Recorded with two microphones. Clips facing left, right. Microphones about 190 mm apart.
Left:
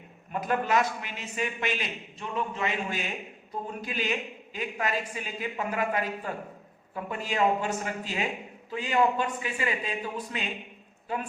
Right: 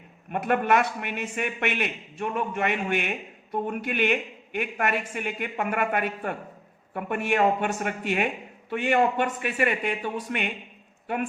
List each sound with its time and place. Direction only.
0.3 s a man's voice: 65° right (ahead or behind)